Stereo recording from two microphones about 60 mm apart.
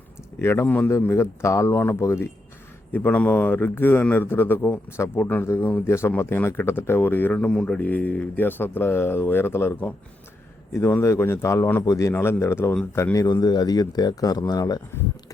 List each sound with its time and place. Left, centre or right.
0.3 s speech: left
0.9 s speech: left
1.8 s speech: left
2.9 s speech: left
7.3 s a man's voice: centre
7.8 s a man's voice: left
12.2 s speech: left
13.1 s speech: left